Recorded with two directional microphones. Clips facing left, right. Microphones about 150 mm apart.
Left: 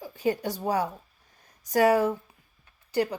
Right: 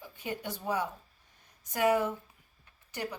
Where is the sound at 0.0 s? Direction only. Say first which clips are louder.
Left 10 dB; 40° left (ahead or behind).